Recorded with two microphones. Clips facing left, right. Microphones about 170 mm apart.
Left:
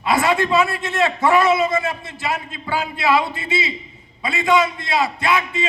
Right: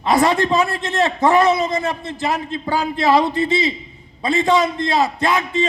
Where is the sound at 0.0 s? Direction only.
40° right (ahead or behind).